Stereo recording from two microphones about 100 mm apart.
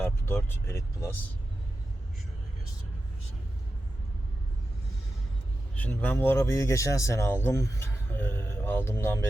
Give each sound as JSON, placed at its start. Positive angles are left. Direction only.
{"t": 0.0, "sound": "speech", "side_deg": 25}
{"t": 5.7, "sound": "speech", "side_deg": 15}